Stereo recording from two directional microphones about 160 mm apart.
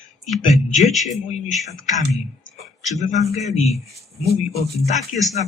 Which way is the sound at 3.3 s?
45° left (ahead or behind).